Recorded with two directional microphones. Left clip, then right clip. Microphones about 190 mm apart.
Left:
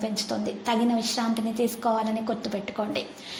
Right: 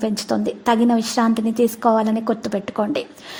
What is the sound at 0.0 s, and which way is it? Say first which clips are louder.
A woman's voice: right 7 dB; 55° right (ahead or behind).